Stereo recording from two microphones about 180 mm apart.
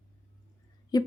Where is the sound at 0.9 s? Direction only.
20° left (ahead or behind).